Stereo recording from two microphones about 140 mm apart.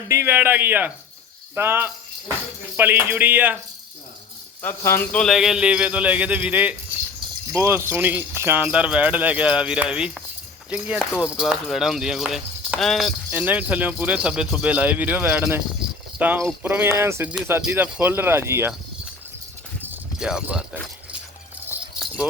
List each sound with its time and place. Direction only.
0.1 s speech: 15° right (ahead or behind)
4.6 s speech: 15° left (ahead or behind)
5.1 s speech: centre (ahead or behind)
13.3 s speech: 10° right (ahead or behind)
20.1 s speech: 5° right (ahead or behind)